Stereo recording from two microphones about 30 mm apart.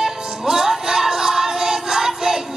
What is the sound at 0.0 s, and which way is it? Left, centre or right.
Music, centre.